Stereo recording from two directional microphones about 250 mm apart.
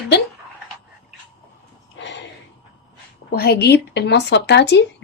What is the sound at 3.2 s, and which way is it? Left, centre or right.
Speech, left.